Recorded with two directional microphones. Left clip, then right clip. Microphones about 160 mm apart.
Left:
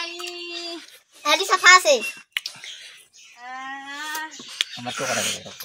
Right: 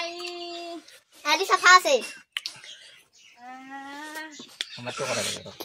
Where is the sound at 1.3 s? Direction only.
30° left (ahead or behind).